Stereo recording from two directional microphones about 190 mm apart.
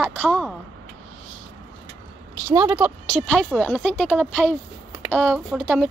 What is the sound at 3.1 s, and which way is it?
Speech, 5° left (ahead or behind).